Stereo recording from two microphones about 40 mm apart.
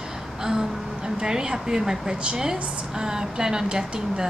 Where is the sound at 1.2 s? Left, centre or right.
Centre.